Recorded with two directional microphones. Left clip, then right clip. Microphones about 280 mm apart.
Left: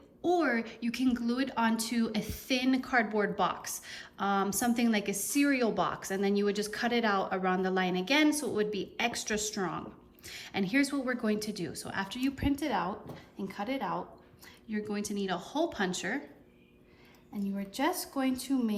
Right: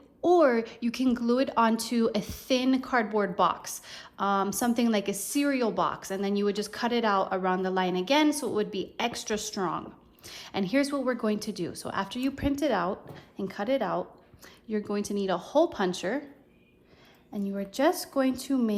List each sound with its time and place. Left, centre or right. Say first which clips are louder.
0.2 s speech: right 7 dB; centre
17.7 s speech: right 6 dB; right